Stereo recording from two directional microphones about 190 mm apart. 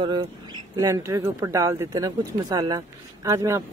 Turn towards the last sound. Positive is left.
turn(degrees=-15)  # may be behind; listen again after turning